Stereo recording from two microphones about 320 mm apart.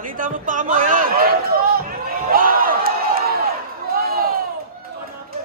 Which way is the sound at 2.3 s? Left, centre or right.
Right.